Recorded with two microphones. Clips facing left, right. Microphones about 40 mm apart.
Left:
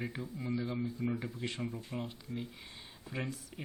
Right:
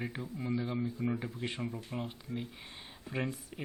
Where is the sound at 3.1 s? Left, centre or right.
Right.